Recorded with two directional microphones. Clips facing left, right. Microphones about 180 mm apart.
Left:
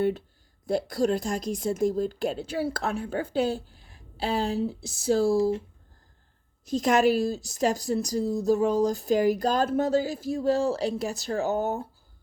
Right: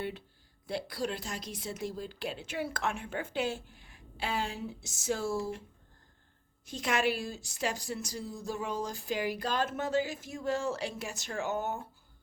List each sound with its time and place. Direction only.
0.7 s a woman's voice: 45° left (ahead or behind)
6.7 s a woman's voice: 40° left (ahead or behind)